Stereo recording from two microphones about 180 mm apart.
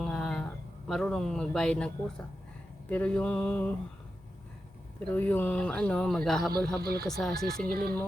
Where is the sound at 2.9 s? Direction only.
5° left (ahead or behind).